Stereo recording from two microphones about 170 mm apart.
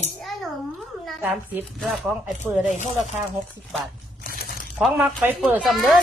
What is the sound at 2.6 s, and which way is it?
Speech, 45° left (ahead or behind).